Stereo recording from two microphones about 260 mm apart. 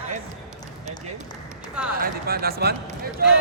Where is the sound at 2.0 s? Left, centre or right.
Right.